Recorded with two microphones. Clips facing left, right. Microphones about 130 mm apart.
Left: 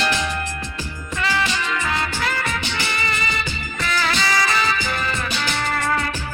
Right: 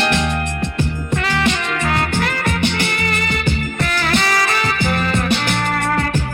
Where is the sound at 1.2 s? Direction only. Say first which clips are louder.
Right 2 dB; 55° right (ahead or behind).